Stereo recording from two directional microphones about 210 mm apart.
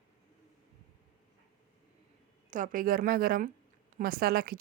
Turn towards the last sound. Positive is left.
turn(degrees=-45)  # may be behind; listen again after turning